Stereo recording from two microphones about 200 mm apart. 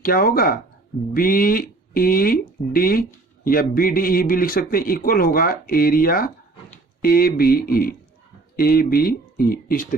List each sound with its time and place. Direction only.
0.0 s speech: 45° left (ahead or behind)